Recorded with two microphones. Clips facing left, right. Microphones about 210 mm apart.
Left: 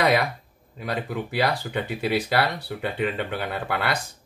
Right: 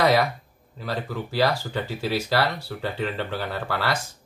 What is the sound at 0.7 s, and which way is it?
Speech, 20° left (ahead or behind).